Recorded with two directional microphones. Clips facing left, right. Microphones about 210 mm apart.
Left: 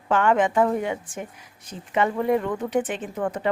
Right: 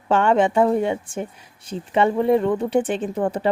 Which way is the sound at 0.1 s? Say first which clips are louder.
Right 3 dB; 30° right (ahead or behind).